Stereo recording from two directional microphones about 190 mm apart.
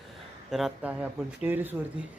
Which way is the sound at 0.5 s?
5° right (ahead or behind).